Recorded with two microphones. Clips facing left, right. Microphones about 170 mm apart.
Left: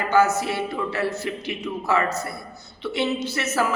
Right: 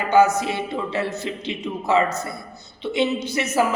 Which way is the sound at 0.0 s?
15° right (ahead or behind).